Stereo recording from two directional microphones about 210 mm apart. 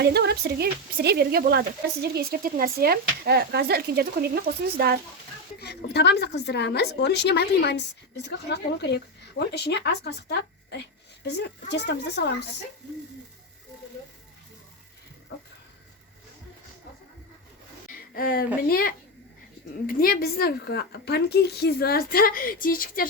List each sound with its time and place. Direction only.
0.0 s speech: 50° right (ahead or behind)
5.5 s a woman's voice: 50° left (ahead or behind)
18.1 s a woman's voice: 45° left (ahead or behind)